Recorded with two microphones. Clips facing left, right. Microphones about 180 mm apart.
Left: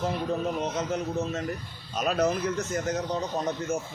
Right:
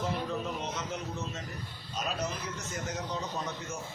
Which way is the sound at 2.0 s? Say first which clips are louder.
Left 10 dB; 60° left (ahead or behind).